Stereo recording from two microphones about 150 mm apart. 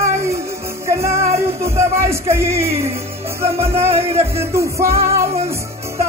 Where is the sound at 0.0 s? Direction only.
20° right (ahead or behind).